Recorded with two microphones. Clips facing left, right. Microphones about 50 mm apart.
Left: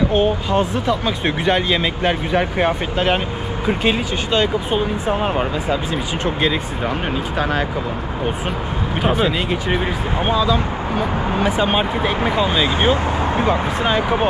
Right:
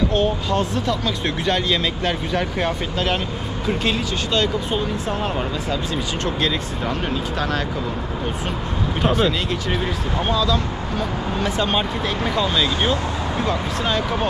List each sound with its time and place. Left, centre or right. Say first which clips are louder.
0.1 s speech: left 3 dB; centre
7.3 s speech: left 5 dB; centre
9.0 s speech: left 1 dB; centre